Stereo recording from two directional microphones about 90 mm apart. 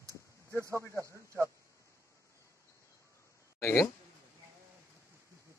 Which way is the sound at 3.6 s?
30° left (ahead or behind).